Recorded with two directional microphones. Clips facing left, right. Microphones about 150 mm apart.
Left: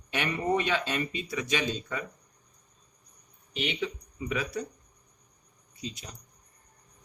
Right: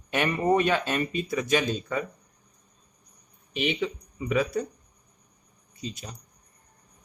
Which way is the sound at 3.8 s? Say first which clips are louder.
Right 3 dB; 50° right (ahead or behind).